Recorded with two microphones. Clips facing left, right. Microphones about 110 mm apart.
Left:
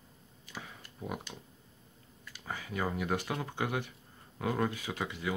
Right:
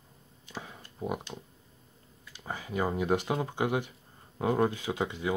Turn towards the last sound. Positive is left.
turn(degrees=-20)  # may be behind; listen again after turning